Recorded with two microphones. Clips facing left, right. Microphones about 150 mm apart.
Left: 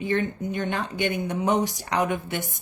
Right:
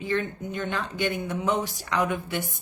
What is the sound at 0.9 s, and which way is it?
Speech, 20° left (ahead or behind).